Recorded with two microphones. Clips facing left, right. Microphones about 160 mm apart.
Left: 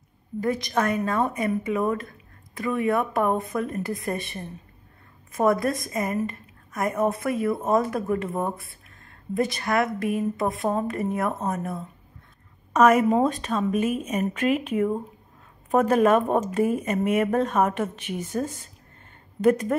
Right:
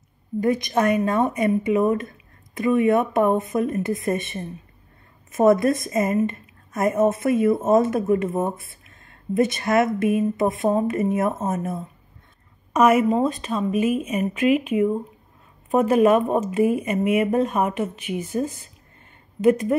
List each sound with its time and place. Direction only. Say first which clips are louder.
0.4 s a woman's voice: right 4 dB; 20° right (ahead or behind)
12.7 s speech: right 1 dB; 10° right (ahead or behind)
19.4 s speech: right 2 dB; 10° right (ahead or behind)